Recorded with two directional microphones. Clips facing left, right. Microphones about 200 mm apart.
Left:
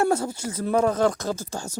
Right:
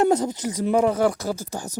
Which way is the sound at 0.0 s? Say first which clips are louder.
Right 3 dB; 20° right (ahead or behind).